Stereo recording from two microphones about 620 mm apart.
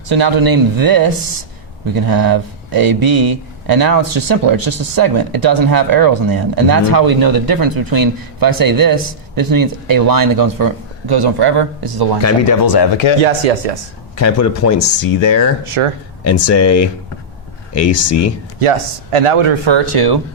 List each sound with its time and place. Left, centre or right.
0.1 s speech: right
12.2 s speech: left
13.2 s speech: right
14.2 s speech: left
15.8 s speech: right
16.2 s speech: left
19.1 s speech: right